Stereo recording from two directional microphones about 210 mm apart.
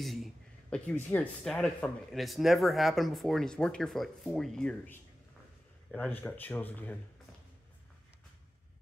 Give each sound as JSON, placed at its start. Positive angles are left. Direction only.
{"t": 0.0, "sound": "speech", "side_deg": 0}